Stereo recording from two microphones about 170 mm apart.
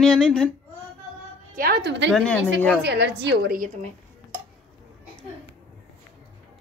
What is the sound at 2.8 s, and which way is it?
Speech, 85° right.